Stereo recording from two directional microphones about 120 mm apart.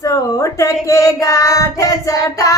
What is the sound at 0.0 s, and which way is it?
Child singing, 25° left (ahead or behind).